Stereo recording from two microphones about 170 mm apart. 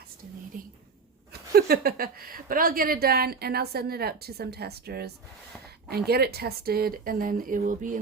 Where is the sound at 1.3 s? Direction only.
65° right (ahead or behind).